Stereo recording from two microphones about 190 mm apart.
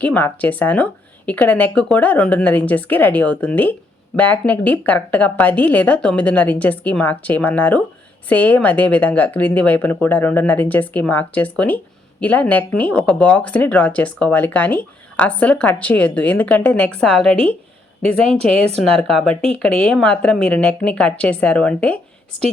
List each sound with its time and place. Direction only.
0.0 s speech: 10° left (ahead or behind)
18.0 s speech: 30° right (ahead or behind)
18.9 s a woman's voice: 5° left (ahead or behind)
19.3 s speech: 30° right (ahead or behind)
19.5 s a woman's voice: 5° left (ahead or behind)